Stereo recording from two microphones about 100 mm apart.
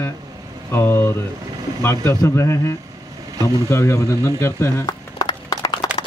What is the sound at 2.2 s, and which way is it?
Speech, 30° left (ahead or behind).